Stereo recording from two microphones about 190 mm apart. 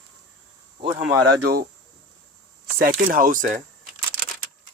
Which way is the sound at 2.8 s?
50° right (ahead or behind).